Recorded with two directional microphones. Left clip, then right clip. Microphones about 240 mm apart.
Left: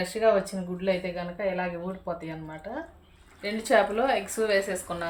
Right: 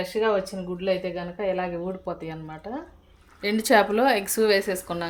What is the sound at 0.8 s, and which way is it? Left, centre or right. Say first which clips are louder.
A woman's voice: right 2 dB; right.